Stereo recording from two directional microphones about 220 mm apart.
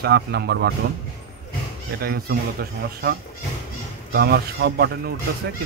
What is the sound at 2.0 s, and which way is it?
Speech, 45° right (ahead or behind).